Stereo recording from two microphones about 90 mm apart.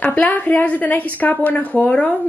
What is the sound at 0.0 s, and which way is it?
A woman's voice, 20° left (ahead or behind).